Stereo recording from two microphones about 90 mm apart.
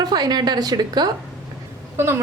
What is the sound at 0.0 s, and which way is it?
A woman's voice, 50° right (ahead or behind).